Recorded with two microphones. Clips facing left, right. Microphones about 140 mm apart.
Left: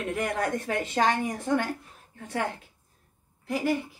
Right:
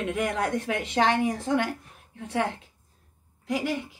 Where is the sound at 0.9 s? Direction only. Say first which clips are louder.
Right 3 dB; 20° right (ahead or behind).